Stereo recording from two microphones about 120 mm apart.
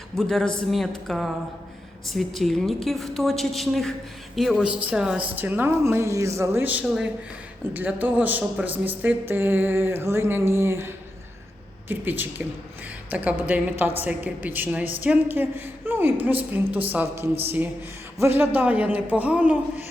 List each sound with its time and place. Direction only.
0.2 s a woman's voice: 5° left (ahead or behind)